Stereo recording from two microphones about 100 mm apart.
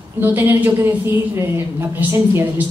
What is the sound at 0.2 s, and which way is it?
A woman's voice, 20° right (ahead or behind).